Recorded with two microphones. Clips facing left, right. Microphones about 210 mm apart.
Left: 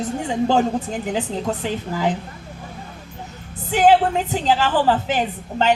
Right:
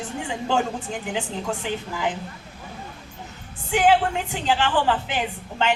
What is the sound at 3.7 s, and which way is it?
A woman's voice, 40° left (ahead or behind).